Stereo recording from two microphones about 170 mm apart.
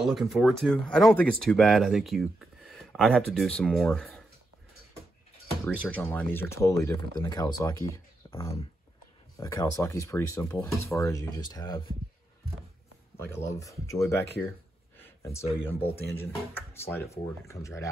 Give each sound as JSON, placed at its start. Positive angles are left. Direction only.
{"t": 0.0, "sound": "speech", "side_deg": 0}
{"t": 5.7, "sound": "speech", "side_deg": 5}
{"t": 8.2, "sound": "a sound", "side_deg": 25}
{"t": 9.4, "sound": "speech", "side_deg": 15}
{"t": 13.3, "sound": "speech", "side_deg": 15}
{"t": 15.0, "sound": "a sound", "side_deg": 15}
{"t": 15.4, "sound": "speech", "side_deg": 35}
{"t": 16.0, "sound": "speech", "side_deg": 10}